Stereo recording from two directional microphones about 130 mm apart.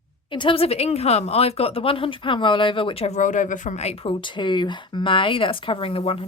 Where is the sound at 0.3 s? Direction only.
40° left (ahead or behind).